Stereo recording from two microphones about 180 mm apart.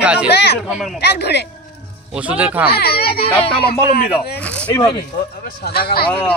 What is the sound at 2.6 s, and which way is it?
A child's voice, 60° left (ahead or behind).